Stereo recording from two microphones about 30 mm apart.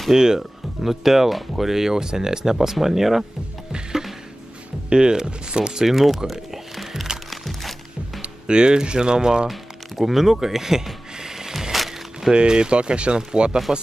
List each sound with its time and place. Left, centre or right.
0.1 s speech: centre
0.4 s speech: centre
4.8 s speech: right
5.9 s speech: centre
6.3 s music: centre
8.2 s speech: right
9.5 s music: centre
11.7 s music: centre
12.3 s speech: right